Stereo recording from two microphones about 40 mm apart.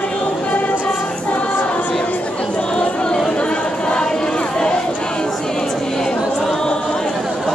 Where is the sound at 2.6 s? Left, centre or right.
Left.